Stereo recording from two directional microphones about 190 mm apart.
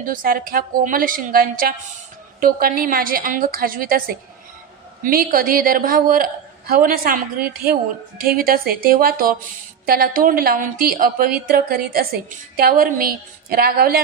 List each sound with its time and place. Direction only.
0.0 s a woman's voice: 50° right (ahead or behind)
5.0 s a woman's voice: 50° right (ahead or behind)